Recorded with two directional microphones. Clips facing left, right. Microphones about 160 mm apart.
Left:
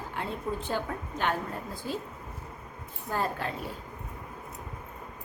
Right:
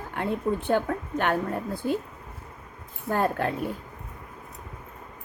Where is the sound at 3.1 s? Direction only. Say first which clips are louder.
Right 6 dB; 55° right (ahead or behind).